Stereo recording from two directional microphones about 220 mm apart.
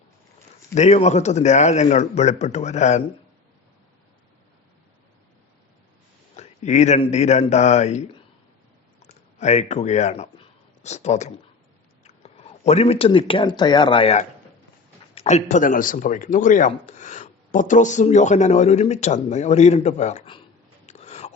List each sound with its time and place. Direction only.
0.7 s speech: 30° left (ahead or behind)
6.3 s speech: 30° left (ahead or behind)
9.4 s speech: 30° left (ahead or behind)
20.8 s a sound: 30° left (ahead or behind)